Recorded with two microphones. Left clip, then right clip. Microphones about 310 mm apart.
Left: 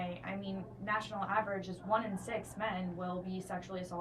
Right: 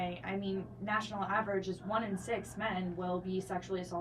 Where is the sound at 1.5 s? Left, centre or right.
Centre.